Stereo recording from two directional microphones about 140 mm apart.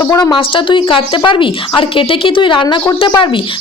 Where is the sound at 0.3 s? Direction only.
35° left (ahead or behind).